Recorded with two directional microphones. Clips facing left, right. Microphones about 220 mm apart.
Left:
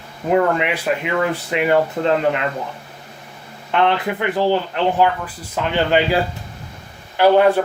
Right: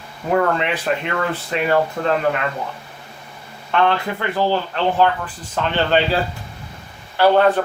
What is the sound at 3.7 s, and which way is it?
Speech, 20° left (ahead or behind).